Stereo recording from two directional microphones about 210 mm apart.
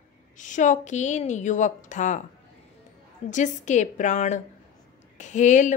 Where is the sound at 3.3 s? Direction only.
35° left (ahead or behind).